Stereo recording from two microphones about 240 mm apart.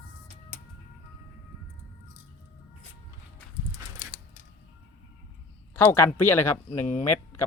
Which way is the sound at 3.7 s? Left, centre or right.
Left.